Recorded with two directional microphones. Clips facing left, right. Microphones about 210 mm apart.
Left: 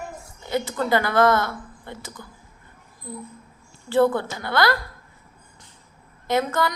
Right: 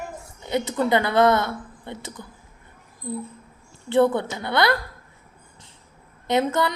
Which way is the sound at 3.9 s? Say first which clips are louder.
Even; 20° right (ahead or behind).